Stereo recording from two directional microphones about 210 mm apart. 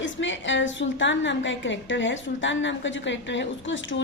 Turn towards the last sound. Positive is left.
turn(degrees=60)  # may be behind; listen again after turning